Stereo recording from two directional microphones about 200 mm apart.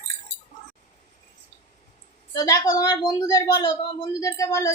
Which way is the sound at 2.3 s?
15° left (ahead or behind).